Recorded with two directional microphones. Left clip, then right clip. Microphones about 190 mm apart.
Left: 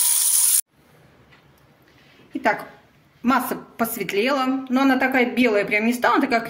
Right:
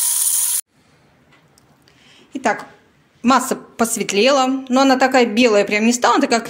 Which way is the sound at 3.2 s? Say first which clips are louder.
Right 5 dB; 40° right (ahead or behind).